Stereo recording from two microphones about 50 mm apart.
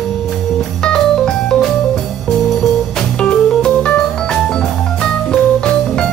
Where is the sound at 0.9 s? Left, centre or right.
Centre.